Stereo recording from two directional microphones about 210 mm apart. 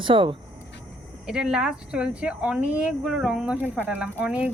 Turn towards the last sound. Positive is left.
turn(degrees=-5)  # may be behind; listen again after turning